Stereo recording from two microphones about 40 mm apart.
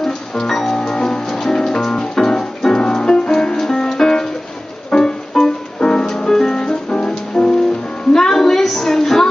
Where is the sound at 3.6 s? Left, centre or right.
Centre.